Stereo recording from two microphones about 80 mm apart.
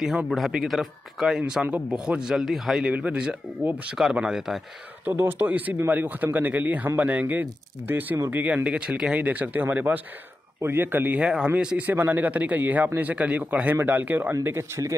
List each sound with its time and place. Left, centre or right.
0.0 s speech: centre
2.8 s speech: centre
5.0 s a man's voice: right